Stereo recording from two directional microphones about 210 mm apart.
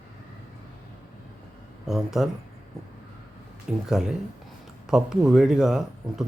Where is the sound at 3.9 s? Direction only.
5° right (ahead or behind).